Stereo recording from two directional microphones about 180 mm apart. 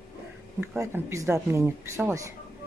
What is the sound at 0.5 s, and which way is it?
Speech, 15° right (ahead or behind).